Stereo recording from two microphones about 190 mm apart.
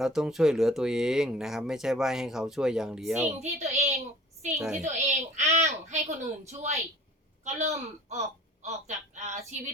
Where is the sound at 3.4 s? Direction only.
35° right (ahead or behind).